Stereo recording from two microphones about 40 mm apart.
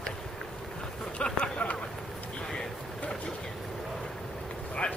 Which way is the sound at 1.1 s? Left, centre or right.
Left.